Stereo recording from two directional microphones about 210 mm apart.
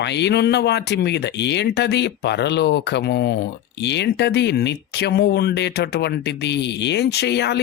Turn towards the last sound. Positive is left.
turn(degrees=55)  # may be behind; listen again after turning